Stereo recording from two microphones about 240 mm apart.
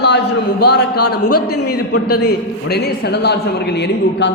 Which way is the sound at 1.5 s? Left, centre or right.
Left.